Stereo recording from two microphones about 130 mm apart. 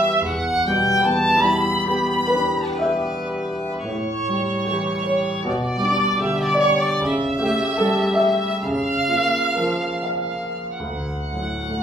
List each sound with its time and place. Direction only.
0.2 s music: 5° right (ahead or behind)
0.7 s music: 25° left (ahead or behind)
0.9 s music: centre (ahead or behind)
4.7 s music: 5° right (ahead or behind)